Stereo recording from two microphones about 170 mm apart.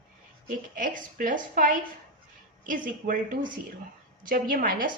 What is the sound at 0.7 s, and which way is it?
A woman's voice, 50° right (ahead or behind).